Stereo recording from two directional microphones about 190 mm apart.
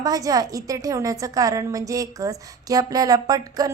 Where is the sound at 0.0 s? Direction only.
20° right (ahead or behind).